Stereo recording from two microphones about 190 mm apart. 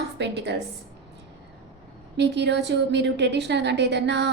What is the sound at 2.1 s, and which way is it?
A woman's voice, 65° right (ahead or behind).